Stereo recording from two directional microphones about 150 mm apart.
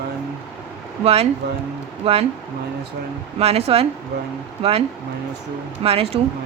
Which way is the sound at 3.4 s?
40° right (ahead or behind).